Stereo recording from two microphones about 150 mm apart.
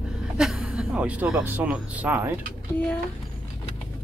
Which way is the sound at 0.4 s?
5° right (ahead or behind).